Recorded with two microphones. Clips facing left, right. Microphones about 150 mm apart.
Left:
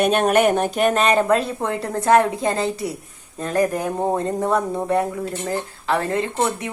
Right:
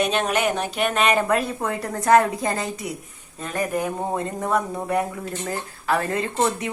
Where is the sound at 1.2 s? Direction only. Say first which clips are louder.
Left 3 dB; 25° left (ahead or behind).